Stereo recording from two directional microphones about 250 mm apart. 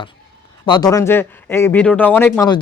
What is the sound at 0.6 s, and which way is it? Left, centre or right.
Speech, centre.